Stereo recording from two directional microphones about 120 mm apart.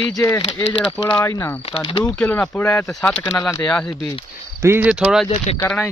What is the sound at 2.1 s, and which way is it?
Speech, 10° left (ahead or behind).